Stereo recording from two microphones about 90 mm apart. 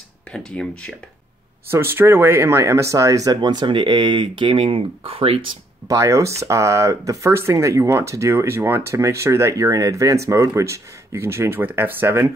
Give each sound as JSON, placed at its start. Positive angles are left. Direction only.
{"t": 0.3, "sound": "speech", "side_deg": 10}
{"t": 1.7, "sound": "speech", "side_deg": -25}
{"t": 3.3, "sound": "speech", "side_deg": -60}
{"t": 5.9, "sound": "speech", "side_deg": -35}